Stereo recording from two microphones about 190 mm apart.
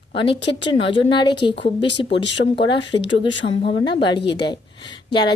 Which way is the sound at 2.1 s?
70° left (ahead or behind).